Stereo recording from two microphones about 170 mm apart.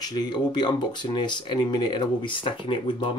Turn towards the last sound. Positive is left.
turn(degrees=30)  # may be behind; listen again after turning